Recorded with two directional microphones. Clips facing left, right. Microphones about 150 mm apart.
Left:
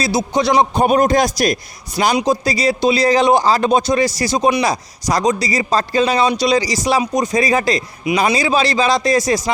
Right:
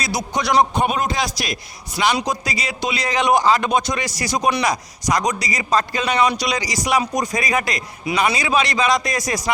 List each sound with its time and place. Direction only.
0.0 s speech: 25° left (ahead or behind); by 1.5 s 45° left (ahead or behind)
2.2 s speech: 30° left (ahead or behind)